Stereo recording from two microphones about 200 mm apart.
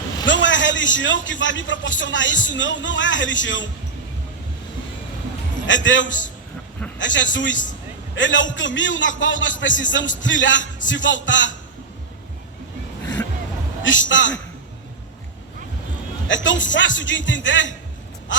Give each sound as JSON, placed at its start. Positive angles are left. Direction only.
{"t": 0.3, "sound": "a man's voice", "side_deg": 65}
{"t": 5.6, "sound": "a man's voice", "side_deg": 70}
{"t": 13.8, "sound": "a man's voice", "side_deg": 70}
{"t": 16.2, "sound": "a man's voice", "side_deg": 70}